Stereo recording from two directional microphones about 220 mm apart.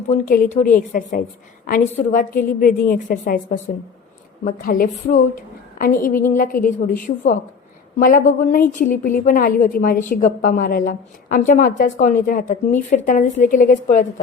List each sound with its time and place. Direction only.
0.1 s a woman's voice: 35° left (ahead or behind)